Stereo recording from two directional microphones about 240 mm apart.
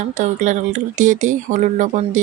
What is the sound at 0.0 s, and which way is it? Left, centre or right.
Speech, right.